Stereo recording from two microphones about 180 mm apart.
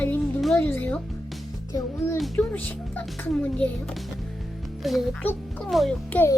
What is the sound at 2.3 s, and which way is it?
A child's voice, 10° left (ahead or behind).